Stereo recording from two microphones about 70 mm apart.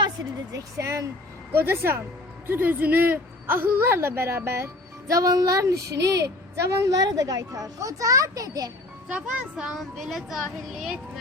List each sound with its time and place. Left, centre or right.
0.5 s a woman's voice: right
9.0 s a child's voice: centre
9.7 s speech: centre